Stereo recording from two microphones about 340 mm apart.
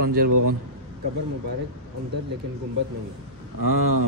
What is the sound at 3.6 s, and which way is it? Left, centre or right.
Speech, right.